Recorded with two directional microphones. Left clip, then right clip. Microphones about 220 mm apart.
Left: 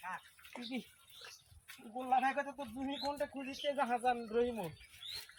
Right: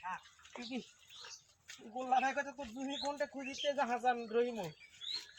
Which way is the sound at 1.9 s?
20° right (ahead or behind).